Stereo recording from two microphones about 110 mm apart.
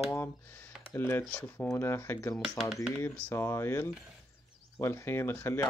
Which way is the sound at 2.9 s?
20° left (ahead or behind).